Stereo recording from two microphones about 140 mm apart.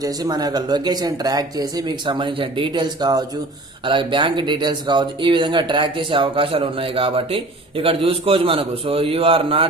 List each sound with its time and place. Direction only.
0.0 s speech: 25° right (ahead or behind)